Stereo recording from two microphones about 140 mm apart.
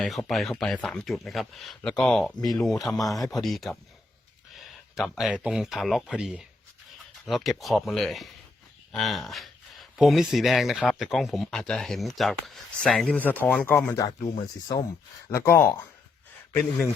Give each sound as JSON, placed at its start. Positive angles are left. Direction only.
{"t": 0.0, "sound": "speech", "side_deg": 5}
{"t": 14.2, "sound": "speech", "side_deg": 50}
{"t": 15.3, "sound": "speech", "side_deg": 20}